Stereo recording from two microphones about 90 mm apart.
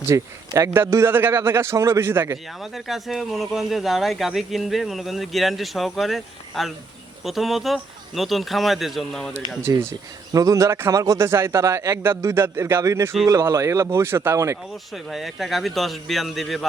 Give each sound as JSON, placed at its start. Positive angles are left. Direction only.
{"t": 0.1, "sound": "a man's voice", "side_deg": -35}
{"t": 2.6, "sound": "speech", "side_deg": 0}
{"t": 9.7, "sound": "a man's voice", "side_deg": -40}
{"t": 14.9, "sound": "speech", "side_deg": 0}